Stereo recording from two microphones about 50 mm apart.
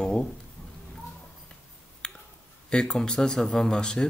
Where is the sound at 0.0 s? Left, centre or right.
Centre.